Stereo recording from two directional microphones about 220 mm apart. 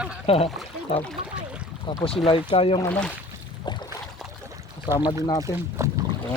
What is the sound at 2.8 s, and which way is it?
Speech, 5° left (ahead or behind).